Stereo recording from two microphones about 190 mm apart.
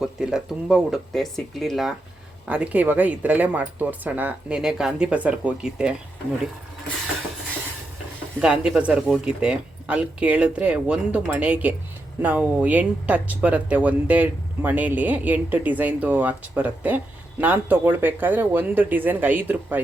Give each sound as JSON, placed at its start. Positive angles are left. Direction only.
{"t": 0.0, "sound": "speech", "side_deg": -5}
{"t": 8.4, "sound": "speech", "side_deg": -5}